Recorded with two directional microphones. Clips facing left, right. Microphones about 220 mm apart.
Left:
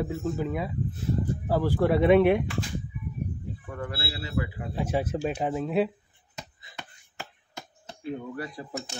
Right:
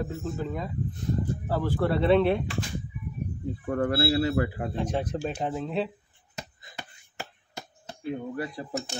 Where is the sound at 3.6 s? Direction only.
50° right (ahead or behind).